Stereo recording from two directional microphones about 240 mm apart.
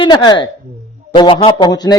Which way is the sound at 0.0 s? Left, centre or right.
Centre.